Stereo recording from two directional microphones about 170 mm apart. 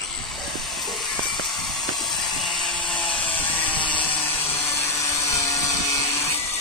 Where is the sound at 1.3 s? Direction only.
Centre (ahead or behind).